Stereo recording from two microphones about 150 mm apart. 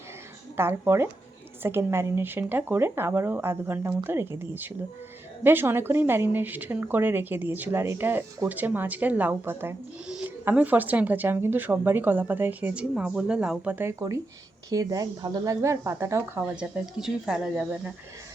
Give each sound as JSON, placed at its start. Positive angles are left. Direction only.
{"t": 0.5, "sound": "speech", "side_deg": -15}